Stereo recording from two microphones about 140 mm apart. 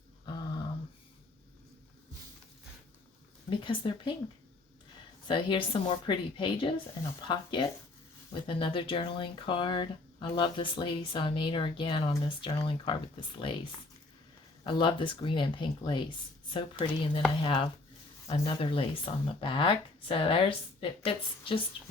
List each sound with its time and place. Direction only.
0.3 s a sound: 30° left (ahead or behind)
3.6 s speech: 35° left (ahead or behind)
5.3 s speech: 35° left (ahead or behind)
14.6 s speech: 35° left (ahead or behind)